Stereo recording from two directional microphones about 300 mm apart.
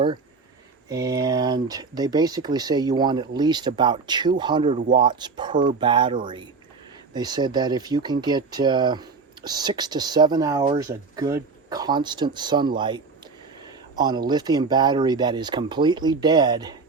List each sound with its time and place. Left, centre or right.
0.9 s speech: centre